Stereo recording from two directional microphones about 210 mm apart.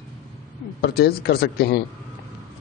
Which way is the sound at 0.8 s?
50° left (ahead or behind).